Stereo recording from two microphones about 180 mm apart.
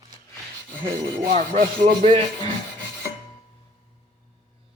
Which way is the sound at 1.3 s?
50° right (ahead or behind).